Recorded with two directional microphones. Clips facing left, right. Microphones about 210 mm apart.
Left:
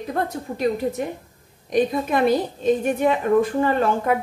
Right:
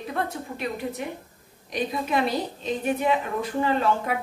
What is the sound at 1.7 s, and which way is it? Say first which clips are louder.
A woman's voice: left 6 dB; 50° left (ahead or behind).